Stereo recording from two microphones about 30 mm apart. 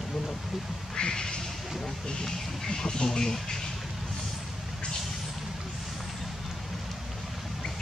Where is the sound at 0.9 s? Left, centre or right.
Left.